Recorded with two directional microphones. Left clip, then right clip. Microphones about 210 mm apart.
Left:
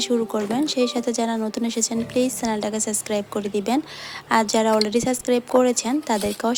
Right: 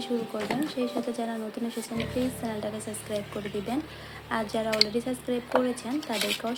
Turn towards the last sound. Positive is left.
turn(degrees=50)  # may be behind; listen again after turning